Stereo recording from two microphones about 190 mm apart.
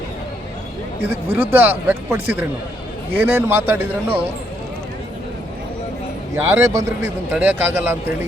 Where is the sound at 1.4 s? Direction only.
10° right (ahead or behind).